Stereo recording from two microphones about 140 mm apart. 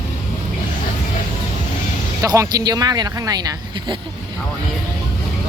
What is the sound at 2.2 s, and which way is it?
Speech, 25° right (ahead or behind).